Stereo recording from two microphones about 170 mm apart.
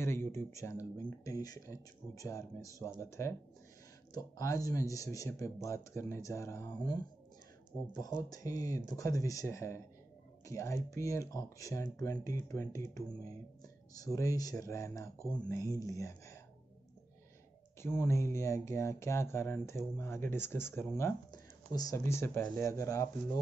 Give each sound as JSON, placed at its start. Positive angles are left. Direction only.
{"t": 0.0, "sound": "speech", "side_deg": 15}
{"t": 8.2, "sound": "speech", "side_deg": 20}
{"t": 13.9, "sound": "speech", "side_deg": 20}
{"t": 17.8, "sound": "speech", "side_deg": 15}